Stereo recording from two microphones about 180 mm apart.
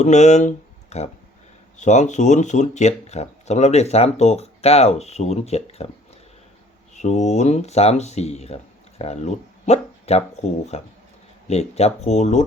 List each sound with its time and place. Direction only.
0.0 s speech: 40° left (ahead or behind)
6.9 s speech: 40° left (ahead or behind)